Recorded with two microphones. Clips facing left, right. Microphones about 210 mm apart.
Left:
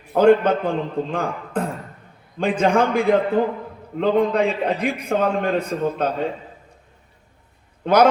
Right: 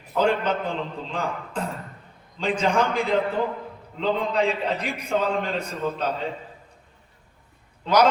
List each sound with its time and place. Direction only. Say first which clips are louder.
0.1 s a man's voice: left 8 dB; 55° left (ahead or behind)
7.9 s a man's voice: left 4 dB; 55° left (ahead or behind)